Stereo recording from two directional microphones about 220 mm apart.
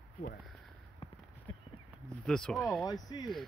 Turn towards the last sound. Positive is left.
turn(degrees=20)  # may be behind; listen again after turning